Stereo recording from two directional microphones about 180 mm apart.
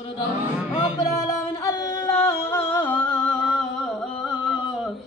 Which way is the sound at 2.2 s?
15° left (ahead or behind).